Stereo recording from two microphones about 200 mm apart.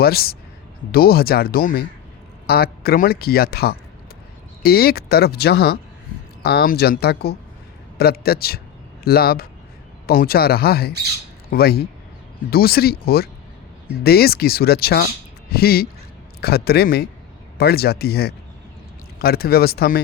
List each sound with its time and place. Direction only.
0.0 s speech: 50° left (ahead or behind)